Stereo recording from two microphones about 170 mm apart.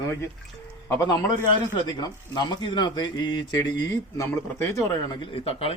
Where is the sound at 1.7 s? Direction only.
25° left (ahead or behind).